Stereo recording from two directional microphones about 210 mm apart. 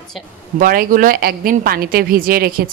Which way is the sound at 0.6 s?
40° right (ahead or behind).